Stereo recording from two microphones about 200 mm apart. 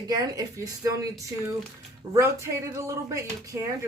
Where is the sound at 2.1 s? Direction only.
15° right (ahead or behind).